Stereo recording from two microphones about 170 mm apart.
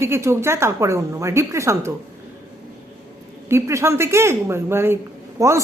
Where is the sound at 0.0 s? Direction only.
15° right (ahead or behind).